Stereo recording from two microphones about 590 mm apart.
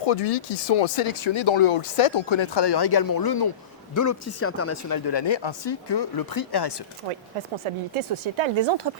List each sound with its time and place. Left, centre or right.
0.0 s speech: left
7.6 s speech: right